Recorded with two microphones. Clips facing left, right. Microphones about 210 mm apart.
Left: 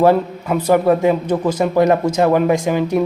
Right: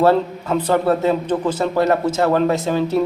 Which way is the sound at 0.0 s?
15° left (ahead or behind).